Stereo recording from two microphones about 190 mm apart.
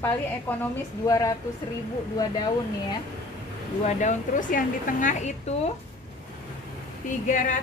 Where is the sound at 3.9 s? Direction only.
40° left (ahead or behind).